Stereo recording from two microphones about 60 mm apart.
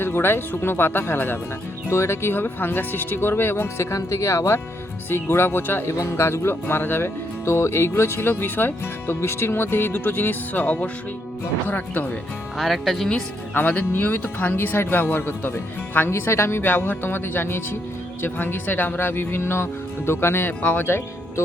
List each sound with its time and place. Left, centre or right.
0.0 s speech: left
1.9 s speech: left
3.9 s speech: left
5.0 s speech: left
6.0 s speech: left
12.5 s speech: centre
13.5 s speech: left
16.6 s speech: left
20.6 s speech: left
20.8 s speech: left